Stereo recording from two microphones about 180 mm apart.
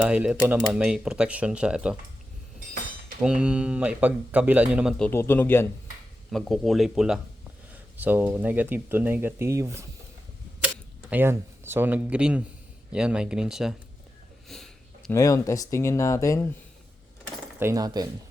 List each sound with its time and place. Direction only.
0.0 s speech: 5° right (ahead or behind)
3.2 s speech: 5° right (ahead or behind)
5.0 s speech: 15° left (ahead or behind)
6.3 s speech: centre (ahead or behind); by 9.8 s 15° right (ahead or behind)
11.1 s speech: 10° right (ahead or behind)
14.4 s sniff: centre (ahead or behind)
15.1 s speech: 15° left (ahead or behind)
17.6 s speech: 20° right (ahead or behind)